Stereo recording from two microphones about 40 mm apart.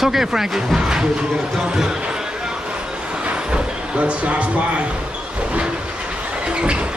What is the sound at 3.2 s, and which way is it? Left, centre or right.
Vehicle, right.